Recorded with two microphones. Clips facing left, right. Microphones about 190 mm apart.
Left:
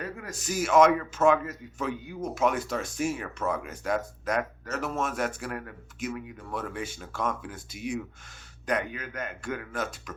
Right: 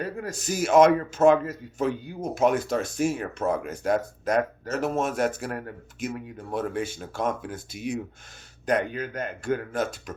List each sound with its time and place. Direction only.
0.0 s a man's voice: 35° right (ahead or behind)